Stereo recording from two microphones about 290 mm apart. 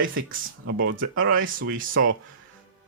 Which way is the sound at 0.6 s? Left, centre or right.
Right.